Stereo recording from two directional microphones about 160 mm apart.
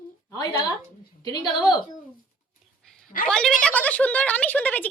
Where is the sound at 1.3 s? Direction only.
25° left (ahead or behind).